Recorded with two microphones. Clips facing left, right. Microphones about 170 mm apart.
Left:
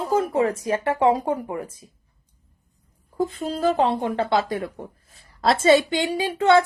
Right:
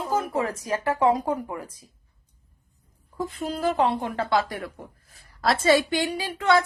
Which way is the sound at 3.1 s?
25° left (ahead or behind).